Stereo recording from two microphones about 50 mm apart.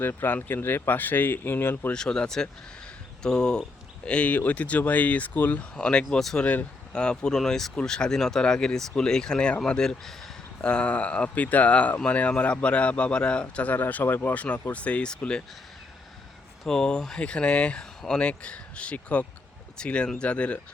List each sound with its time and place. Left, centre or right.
0.0 s speech: left
1.9 s speech: centre
4.3 s speech: left
5.7 s speech: left
6.4 s speech: left
6.9 s speech: centre
13.7 s speech: left
14.7 s speech: left
16.6 s speech: centre